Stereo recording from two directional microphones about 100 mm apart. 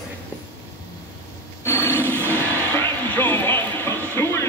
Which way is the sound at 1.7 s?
25° left (ahead or behind).